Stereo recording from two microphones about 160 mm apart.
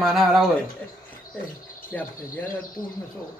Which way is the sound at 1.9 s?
10° left (ahead or behind).